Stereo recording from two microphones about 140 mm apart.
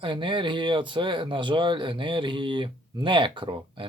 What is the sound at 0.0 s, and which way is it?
Speech, 35° right (ahead or behind).